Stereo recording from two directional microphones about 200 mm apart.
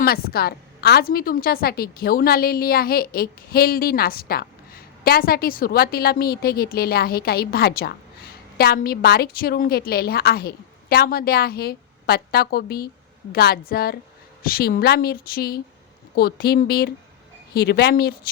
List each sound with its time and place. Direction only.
0.0 s a woman's voice: 50° left (ahead or behind)